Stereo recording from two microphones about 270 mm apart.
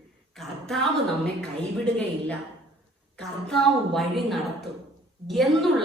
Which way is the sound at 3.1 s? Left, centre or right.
Centre.